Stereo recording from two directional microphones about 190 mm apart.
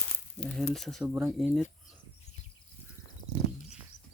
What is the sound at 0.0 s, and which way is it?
Speech, 5° left (ahead or behind).